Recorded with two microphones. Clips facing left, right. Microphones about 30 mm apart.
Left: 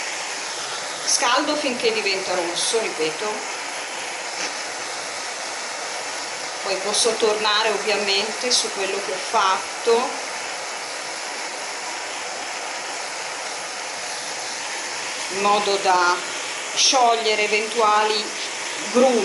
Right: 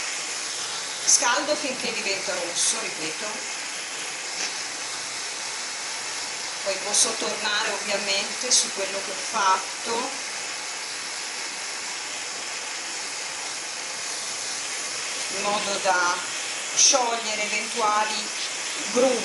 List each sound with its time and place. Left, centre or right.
1.1 s speech: left
6.7 s speech: left
7.1 s speech: left
15.3 s speech: left